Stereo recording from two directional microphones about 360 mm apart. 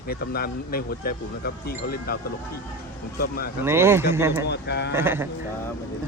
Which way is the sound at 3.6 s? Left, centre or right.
Centre.